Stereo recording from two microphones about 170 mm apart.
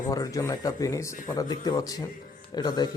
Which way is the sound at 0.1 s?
20° left (ahead or behind).